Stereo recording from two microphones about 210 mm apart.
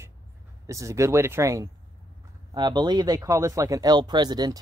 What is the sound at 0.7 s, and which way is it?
Speech, 15° right (ahead or behind).